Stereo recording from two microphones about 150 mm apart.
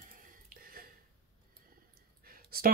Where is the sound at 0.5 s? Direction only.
75° right (ahead or behind).